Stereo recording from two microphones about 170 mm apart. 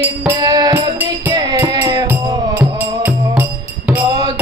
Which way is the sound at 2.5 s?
10° right (ahead or behind).